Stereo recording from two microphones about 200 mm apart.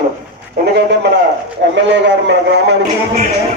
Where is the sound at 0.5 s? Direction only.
55° right (ahead or behind).